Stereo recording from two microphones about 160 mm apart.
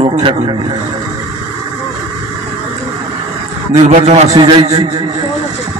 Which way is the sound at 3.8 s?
45° right (ahead or behind).